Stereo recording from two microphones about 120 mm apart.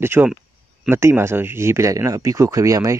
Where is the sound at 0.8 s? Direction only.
20° right (ahead or behind).